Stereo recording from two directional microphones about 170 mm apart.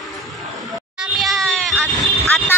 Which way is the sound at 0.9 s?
Centre (ahead or behind).